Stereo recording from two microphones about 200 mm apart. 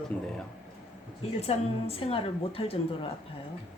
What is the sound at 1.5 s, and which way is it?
A woman's voice, 30° left (ahead or behind).